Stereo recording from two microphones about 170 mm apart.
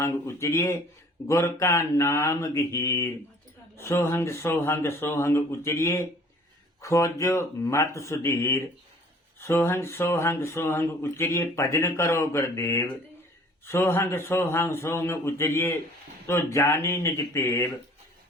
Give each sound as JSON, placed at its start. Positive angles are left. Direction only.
{"t": 0.0, "sound": "speech", "side_deg": 15}